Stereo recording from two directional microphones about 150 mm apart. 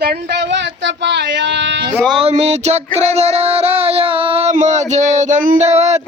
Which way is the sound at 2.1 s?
40° right (ahead or behind).